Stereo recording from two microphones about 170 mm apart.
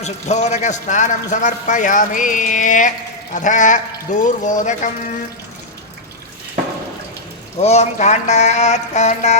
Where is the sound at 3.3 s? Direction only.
45° left (ahead or behind).